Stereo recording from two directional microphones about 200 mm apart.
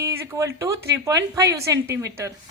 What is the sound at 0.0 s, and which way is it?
A woman's voice, 15° right (ahead or behind).